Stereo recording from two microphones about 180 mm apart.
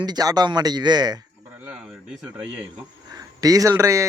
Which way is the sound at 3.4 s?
20° right (ahead or behind).